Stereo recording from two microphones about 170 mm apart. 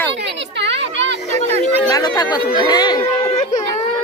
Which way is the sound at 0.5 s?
90° right.